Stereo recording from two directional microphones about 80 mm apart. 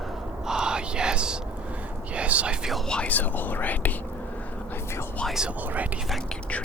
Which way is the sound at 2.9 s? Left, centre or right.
Centre.